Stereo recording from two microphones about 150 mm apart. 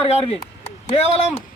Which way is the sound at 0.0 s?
40° left (ahead or behind).